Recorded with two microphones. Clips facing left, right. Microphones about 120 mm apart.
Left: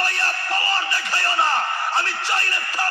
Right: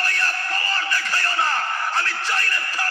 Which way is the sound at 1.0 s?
25° left (ahead or behind).